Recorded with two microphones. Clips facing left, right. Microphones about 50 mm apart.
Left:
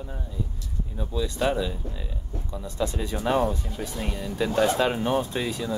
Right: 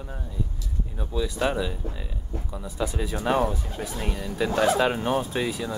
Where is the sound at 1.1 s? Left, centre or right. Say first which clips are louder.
Even; centre.